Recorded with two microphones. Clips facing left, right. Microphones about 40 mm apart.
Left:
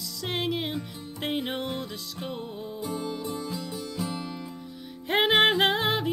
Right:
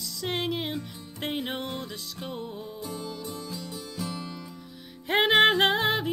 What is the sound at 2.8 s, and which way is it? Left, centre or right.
Music, centre.